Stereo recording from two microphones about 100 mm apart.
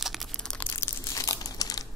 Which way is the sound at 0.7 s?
25° left (ahead or behind).